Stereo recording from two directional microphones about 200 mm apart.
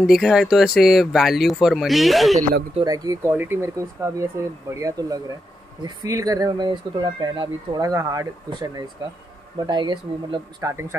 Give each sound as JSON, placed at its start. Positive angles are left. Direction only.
{"t": 0.0, "sound": "speech", "side_deg": 0}
{"t": 2.7, "sound": "speech", "side_deg": -20}